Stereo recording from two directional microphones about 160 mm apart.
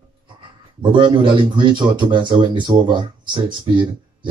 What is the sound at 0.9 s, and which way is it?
Speech, 30° right (ahead or behind).